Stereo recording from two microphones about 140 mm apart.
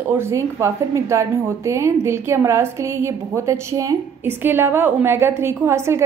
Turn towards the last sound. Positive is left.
turn(degrees=-20)  # may be behind; listen again after turning